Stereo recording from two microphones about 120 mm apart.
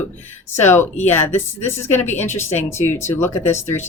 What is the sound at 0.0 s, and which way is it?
Speech, 20° left (ahead or behind).